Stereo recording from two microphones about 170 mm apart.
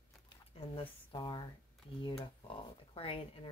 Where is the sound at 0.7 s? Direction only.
25° left (ahead or behind).